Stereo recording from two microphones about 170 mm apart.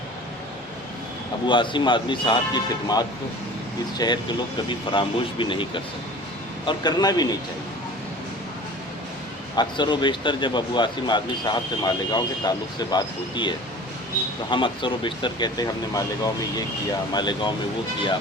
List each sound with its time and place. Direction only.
1.5 s speech: 30° left (ahead or behind)
9.6 s speech: 25° left (ahead or behind)